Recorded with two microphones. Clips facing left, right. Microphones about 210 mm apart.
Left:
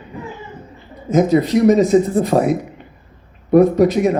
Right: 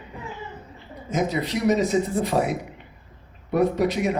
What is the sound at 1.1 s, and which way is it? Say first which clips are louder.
Speech: left 11 dB; 45° left (ahead or behind).